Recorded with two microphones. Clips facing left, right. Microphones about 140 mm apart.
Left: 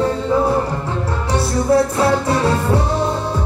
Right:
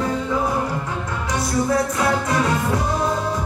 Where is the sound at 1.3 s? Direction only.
30° left (ahead or behind).